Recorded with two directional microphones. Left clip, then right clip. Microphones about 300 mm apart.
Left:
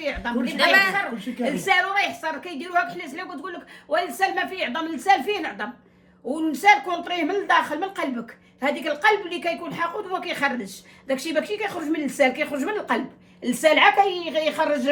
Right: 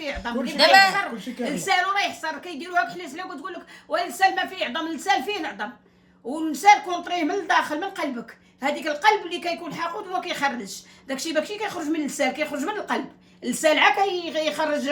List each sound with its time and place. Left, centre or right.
0.0 s a woman's voice: centre
0.5 s a woman's voice: centre
1.5 s a woman's voice: centre